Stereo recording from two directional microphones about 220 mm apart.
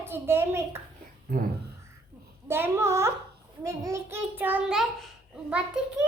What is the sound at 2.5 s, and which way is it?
A child's voice, 10° right (ahead or behind).